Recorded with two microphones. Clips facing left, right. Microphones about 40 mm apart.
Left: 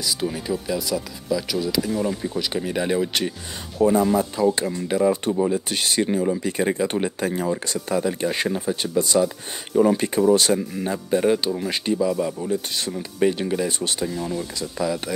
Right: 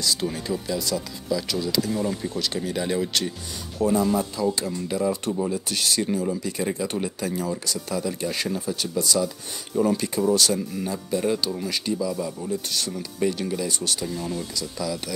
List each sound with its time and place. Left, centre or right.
0.0 s speech: centre; by 15.1 s left